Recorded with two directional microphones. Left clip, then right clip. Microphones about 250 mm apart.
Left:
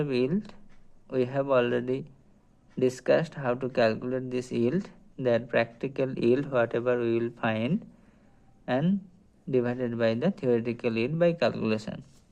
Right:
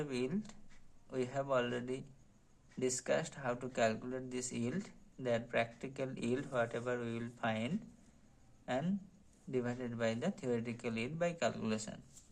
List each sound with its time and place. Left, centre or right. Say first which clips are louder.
0.0 s speech: left 12 dB; left